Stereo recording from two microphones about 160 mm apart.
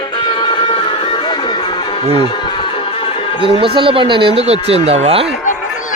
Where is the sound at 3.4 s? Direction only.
35° right (ahead or behind).